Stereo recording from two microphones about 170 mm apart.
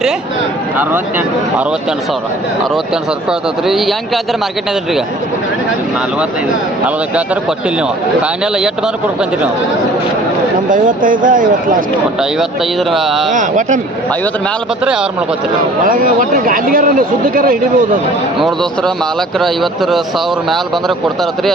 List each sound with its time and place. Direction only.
3.7 s speech: centre (ahead or behind)
10.7 s speech: 50° right (ahead or behind)
12.9 s speech: centre (ahead or behind)
13.3 s speech: 50° right (ahead or behind)
15.9 s speech: 55° right (ahead or behind)
18.3 s speech: centre (ahead or behind)